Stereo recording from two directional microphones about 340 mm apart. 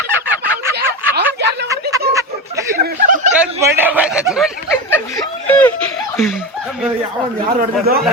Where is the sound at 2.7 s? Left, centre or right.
Right.